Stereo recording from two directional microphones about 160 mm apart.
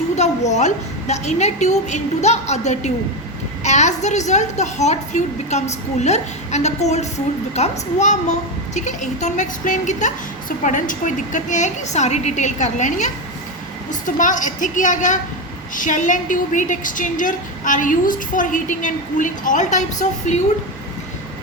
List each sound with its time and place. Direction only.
0.2 s a woman's voice: 45° left (ahead or behind)